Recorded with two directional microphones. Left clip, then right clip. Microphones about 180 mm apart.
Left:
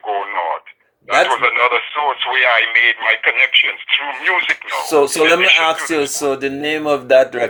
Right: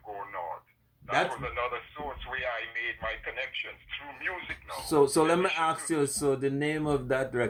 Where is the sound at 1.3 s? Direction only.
40° left (ahead or behind).